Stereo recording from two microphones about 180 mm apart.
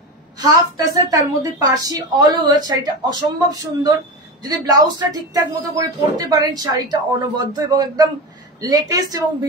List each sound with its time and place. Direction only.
0.4 s speech: 20° right (ahead or behind)